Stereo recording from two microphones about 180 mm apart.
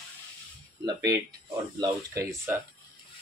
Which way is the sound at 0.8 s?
20° right (ahead or behind).